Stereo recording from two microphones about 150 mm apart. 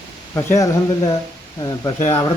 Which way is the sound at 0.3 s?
20° left (ahead or behind).